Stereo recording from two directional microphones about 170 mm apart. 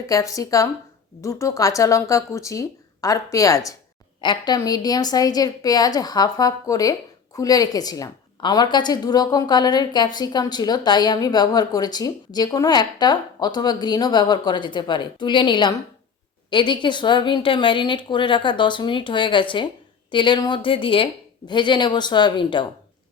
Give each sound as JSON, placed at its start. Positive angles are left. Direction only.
{"t": 0.1, "sound": "a woman's voice", "side_deg": 20}